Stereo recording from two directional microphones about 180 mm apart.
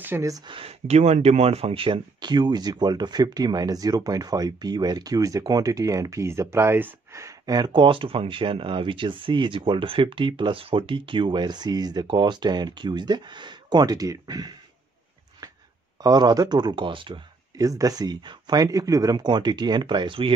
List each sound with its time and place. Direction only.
0.0 s speech: 15° right (ahead or behind)
0.6 s speech: 35° right (ahead or behind)
16.0 s speech: 20° right (ahead or behind)